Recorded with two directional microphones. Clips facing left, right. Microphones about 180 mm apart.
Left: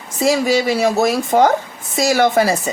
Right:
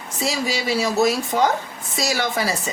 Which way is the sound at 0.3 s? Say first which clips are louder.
Left 9 dB; 55° left (ahead or behind).